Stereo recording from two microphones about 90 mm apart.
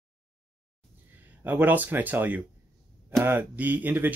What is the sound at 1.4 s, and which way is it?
Speech, 20° right (ahead or behind).